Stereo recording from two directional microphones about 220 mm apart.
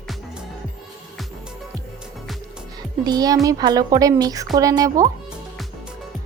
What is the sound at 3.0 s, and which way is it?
Speech, 15° right (ahead or behind).